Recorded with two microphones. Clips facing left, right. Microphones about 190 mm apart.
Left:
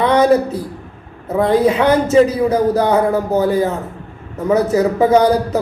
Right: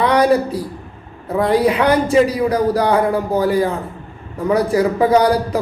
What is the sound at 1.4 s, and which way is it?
A man's voice, 25° left (ahead or behind).